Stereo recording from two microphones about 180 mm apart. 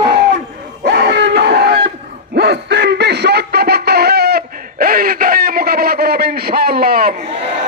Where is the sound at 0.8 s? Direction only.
70° right (ahead or behind).